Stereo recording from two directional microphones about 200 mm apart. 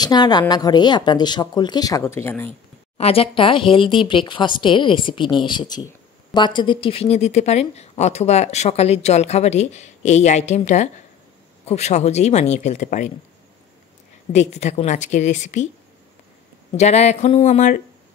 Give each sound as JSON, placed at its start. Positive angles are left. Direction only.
{"t": 0.0, "sound": "speech", "side_deg": 20}
{"t": 3.0, "sound": "a woman's voice", "side_deg": 30}
{"t": 14.3, "sound": "a woman's voice", "side_deg": 35}
{"t": 16.7, "sound": "a woman's voice", "side_deg": 35}